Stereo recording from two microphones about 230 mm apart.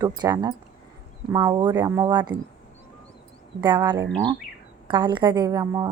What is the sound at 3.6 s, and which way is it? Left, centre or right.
A woman's voice, centre.